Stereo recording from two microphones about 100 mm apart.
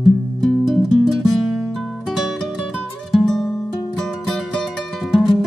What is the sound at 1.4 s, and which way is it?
Music, 15° right (ahead or behind).